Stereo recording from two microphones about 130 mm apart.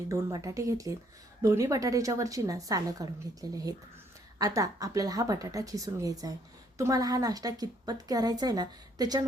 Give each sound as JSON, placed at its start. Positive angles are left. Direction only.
{"t": 0.1, "sound": "a woman's voice", "side_deg": -25}